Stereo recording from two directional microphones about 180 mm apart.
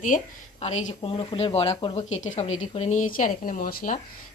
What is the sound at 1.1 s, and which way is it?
Speech, 30° left (ahead or behind).